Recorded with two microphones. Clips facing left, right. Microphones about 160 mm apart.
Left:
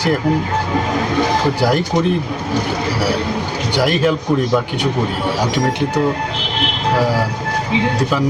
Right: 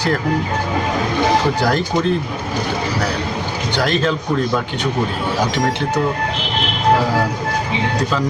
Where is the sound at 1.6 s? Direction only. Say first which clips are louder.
Left 2 dB; 15° left (ahead or behind).